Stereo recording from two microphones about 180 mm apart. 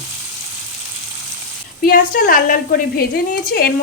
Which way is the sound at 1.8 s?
50° left (ahead or behind).